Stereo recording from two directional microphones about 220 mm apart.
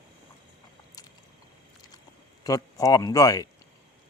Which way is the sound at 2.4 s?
15° left (ahead or behind).